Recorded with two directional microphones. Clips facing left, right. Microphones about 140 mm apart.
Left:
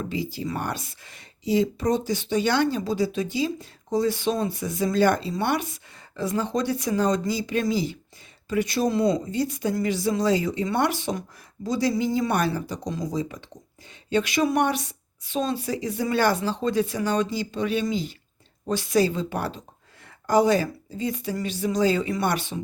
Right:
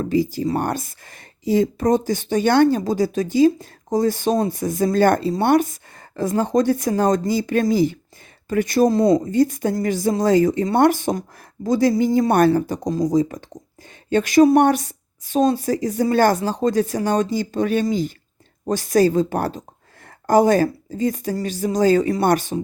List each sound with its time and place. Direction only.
0.0 s speech: 45° right (ahead or behind)